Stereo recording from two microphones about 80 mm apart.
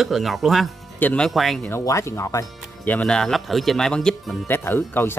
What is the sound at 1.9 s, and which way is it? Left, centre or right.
Speech, left.